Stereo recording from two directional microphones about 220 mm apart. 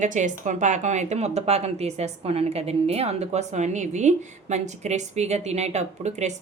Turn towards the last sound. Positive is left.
turn(degrees=-30)  # may be behind; listen again after turning